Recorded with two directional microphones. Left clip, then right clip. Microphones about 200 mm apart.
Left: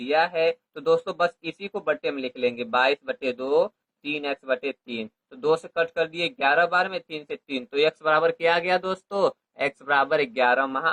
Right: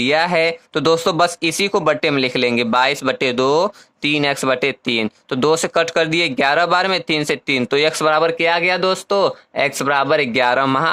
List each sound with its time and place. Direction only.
0.0 s speech: 45° right (ahead or behind)